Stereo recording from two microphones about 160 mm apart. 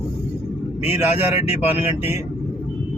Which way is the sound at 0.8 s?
15° right (ahead or behind).